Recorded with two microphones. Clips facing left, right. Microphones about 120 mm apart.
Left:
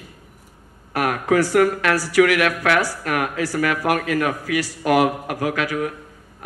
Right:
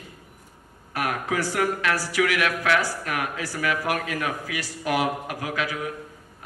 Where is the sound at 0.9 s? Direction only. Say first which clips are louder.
Left 8 dB; 60° left (ahead or behind).